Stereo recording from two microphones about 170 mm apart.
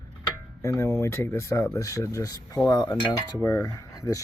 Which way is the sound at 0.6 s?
15° left (ahead or behind).